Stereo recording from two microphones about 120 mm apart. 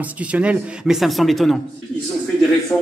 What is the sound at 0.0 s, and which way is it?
A man's voice, 10° right (ahead or behind).